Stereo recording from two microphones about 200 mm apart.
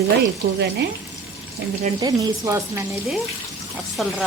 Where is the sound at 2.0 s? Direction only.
15° right (ahead or behind).